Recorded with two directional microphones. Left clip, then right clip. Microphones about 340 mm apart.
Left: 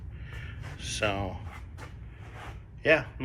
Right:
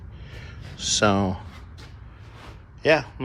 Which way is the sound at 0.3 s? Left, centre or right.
Centre.